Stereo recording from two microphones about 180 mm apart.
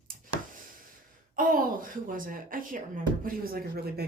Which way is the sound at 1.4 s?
50° right (ahead or behind).